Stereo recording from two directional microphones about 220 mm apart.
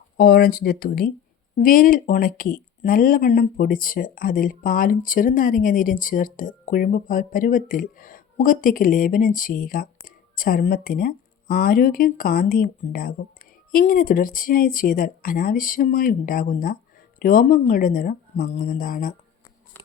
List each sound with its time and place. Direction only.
0.2 s speech: 45° left (ahead or behind)